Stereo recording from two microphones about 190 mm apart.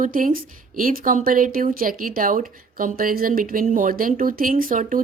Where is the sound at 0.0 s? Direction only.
45° right (ahead or behind).